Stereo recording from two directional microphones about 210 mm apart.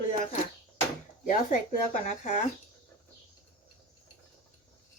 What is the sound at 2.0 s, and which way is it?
Speech, 35° left (ahead or behind).